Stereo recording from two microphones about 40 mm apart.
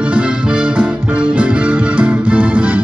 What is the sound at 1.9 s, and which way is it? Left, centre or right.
Music, right.